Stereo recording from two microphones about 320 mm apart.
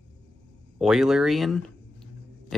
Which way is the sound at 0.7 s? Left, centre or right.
Centre.